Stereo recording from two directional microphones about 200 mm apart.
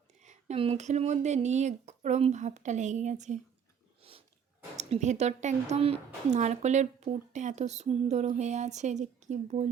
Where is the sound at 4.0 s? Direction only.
30° right (ahead or behind).